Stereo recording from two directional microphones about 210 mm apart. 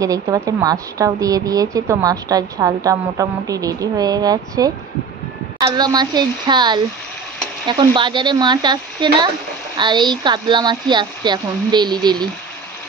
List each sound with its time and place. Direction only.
0.0 s a woman's voice: 15° right (ahead or behind)